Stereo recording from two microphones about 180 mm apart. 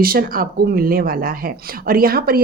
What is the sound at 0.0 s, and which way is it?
Speech, 55° right (ahead or behind).